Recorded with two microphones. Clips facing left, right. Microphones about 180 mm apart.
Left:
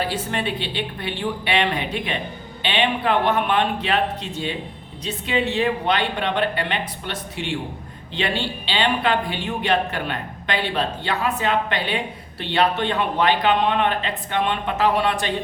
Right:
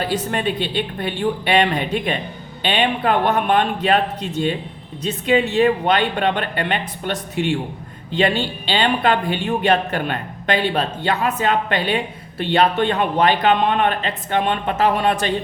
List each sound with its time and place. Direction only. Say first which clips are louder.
0.1 s a man's voice: right 4 dB; 45° right (ahead or behind)